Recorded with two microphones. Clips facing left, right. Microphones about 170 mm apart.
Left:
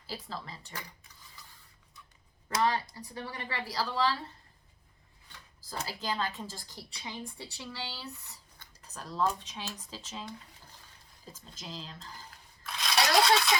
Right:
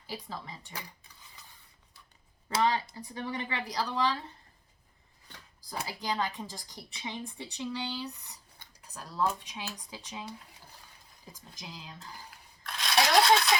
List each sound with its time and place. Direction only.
0.1 s a woman's voice: 15° right (ahead or behind)
2.5 s speech: 20° right (ahead or behind)
5.6 s a woman's voice: 15° right (ahead or behind)
11.3 s a woman's voice: 15° right (ahead or behind)
12.6 s coin: centre (ahead or behind)